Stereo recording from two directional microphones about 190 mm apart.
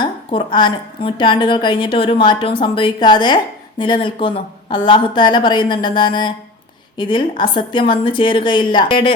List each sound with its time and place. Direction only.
0.0 s a woman's voice: 25° left (ahead or behind)